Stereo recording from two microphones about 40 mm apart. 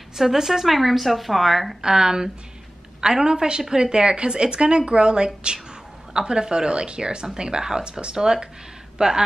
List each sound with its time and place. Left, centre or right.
0.2 s a woman's voice: centre
1.8 s a woman's voice: centre